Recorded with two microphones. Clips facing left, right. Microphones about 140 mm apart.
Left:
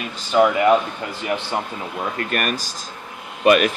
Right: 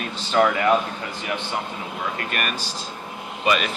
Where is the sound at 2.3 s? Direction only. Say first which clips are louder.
Left 4 dB; 45° left (ahead or behind).